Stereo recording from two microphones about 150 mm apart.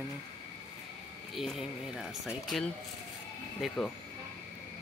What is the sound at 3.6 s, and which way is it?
Speech, centre (ahead or behind).